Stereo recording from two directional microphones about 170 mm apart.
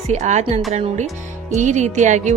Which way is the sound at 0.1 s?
40° right (ahead or behind).